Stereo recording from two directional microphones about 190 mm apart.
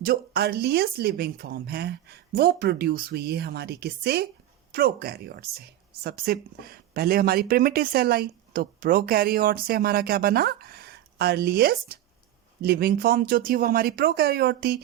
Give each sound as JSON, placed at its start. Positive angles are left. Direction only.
{"t": 0.0, "sound": "speech", "side_deg": -55}